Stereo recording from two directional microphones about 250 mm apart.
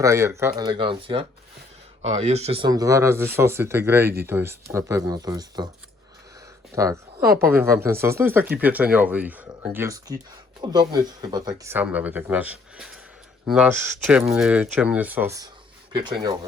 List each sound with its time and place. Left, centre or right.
0.0 s speech: centre
6.7 s speech: centre